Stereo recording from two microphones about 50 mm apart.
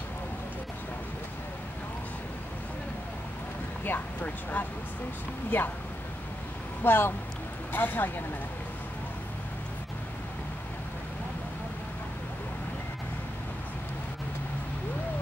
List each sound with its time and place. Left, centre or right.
3.8 s speech: left
6.8 s speech: left